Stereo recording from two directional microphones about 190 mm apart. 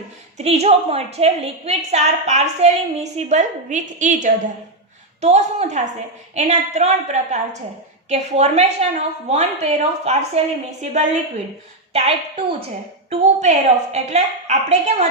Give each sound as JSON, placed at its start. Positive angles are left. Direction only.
{"t": 0.3, "sound": "a woman's voice", "side_deg": -35}
{"t": 13.1, "sound": "a woman's voice", "side_deg": -35}